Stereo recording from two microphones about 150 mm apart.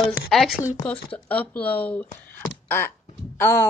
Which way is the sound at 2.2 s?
15° left (ahead or behind).